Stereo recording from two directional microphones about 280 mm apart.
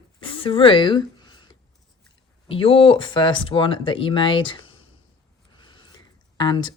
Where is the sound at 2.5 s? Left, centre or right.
Centre.